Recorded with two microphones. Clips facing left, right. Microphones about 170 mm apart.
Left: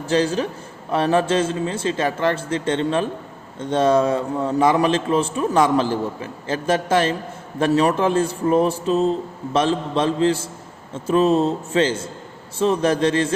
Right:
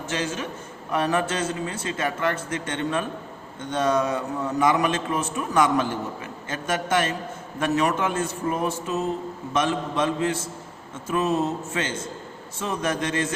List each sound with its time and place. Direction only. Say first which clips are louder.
0.0 s a man's voice: left 9 dB; 35° left (ahead or behind)